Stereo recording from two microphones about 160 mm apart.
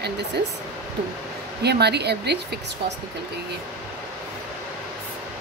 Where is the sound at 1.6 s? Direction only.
90° right.